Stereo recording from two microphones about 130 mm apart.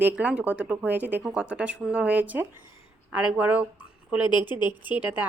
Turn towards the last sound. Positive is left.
turn(degrees=-10)  # may be behind; listen again after turning